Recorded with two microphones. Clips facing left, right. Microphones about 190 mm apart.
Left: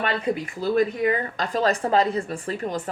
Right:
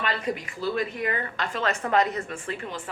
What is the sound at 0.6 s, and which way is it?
Speech, 40° left (ahead or behind).